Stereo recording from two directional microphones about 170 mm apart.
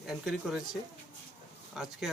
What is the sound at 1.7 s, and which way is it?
Speech, 5° right (ahead or behind).